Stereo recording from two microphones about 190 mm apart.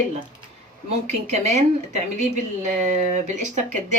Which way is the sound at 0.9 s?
35° right (ahead or behind).